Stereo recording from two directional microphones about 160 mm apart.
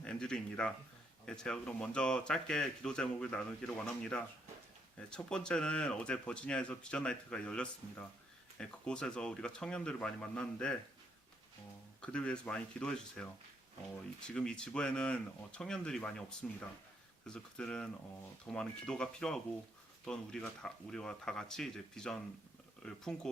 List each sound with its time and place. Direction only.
0.0 s speech: 5° left (ahead or behind)
12.0 s speech: 5° left (ahead or behind)